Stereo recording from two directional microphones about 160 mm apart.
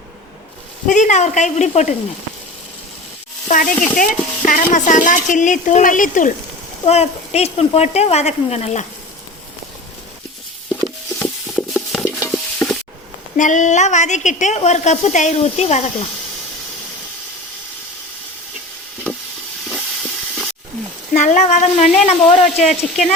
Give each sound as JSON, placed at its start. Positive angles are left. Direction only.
{"t": 0.9, "sound": "speech", "side_deg": 50}
{"t": 3.5, "sound": "speech", "side_deg": 55}
{"t": 6.8, "sound": "speech", "side_deg": 40}
{"t": 11.5, "sound": "a sound", "side_deg": 0}
{"t": 12.0, "sound": "stir", "side_deg": 10}
{"t": 13.3, "sound": "speech", "side_deg": 50}
{"t": 19.6, "sound": "hiss", "side_deg": 5}
{"t": 21.1, "sound": "speech", "side_deg": 50}